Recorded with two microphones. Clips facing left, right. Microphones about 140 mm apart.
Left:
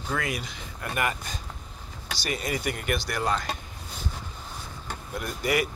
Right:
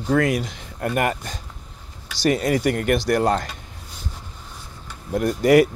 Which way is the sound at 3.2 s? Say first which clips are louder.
Right 7 dB; 50° right (ahead or behind).